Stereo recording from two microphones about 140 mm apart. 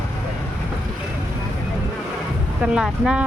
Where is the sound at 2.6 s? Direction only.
5° right (ahead or behind).